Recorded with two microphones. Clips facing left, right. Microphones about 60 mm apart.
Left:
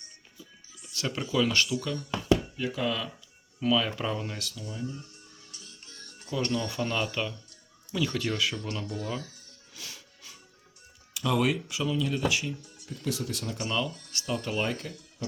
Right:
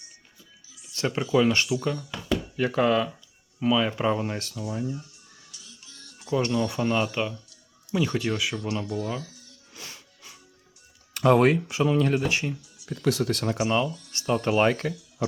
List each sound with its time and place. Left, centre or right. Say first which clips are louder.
0.9 s speech: right 5 dB; right
2.6 s speech: right 8 dB; right
3.6 s speech: right 4 dB; right
4.6 s speech: right 6 dB; right
5.5 s music: right 1 dB; left
6.3 s speech: right 5 dB; right
8.5 s speech: right 5 dB; right
9.2 s a sound: right 3 dB; left
9.7 s music: right 2 dB; right
11.1 s speech: right 8 dB; right
12.3 s speech: right 3 dB; right
12.8 s speech: right 8 dB; right
13.6 s speech: right 4 dB; right
14.5 s speech: right 12 dB; right